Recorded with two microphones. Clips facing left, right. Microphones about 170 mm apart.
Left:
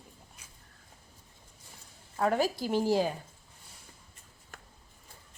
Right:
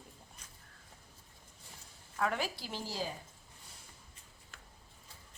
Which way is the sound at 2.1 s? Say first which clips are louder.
Left 7 dB; 35° left (ahead or behind).